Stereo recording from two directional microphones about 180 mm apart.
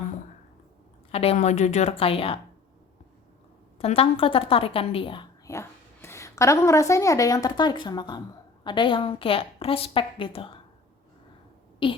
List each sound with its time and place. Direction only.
1.1 s a woman's voice: 35° left (ahead or behind)
3.8 s a woman's voice: 30° left (ahead or behind)
5.5 s a woman's voice: 15° left (ahead or behind); by 10.6 s 30° left (ahead or behind)
11.8 s a woman's voice: 30° left (ahead or behind)